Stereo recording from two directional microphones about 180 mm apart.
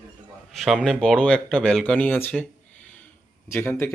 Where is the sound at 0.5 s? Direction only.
Centre (ahead or behind).